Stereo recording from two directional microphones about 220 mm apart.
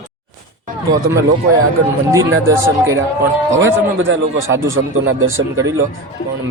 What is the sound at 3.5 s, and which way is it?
A man's voice, 60° right (ahead or behind).